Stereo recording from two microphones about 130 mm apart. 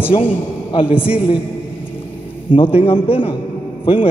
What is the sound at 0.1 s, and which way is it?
Speech, 45° left (ahead or behind).